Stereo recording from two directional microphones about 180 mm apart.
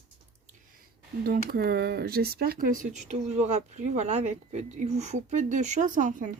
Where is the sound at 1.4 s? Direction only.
60° right (ahead or behind).